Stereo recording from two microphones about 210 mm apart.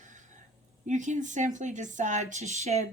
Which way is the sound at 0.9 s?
35° right (ahead or behind).